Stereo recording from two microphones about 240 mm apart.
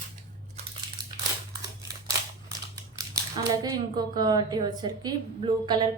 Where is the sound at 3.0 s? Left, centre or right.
Centre.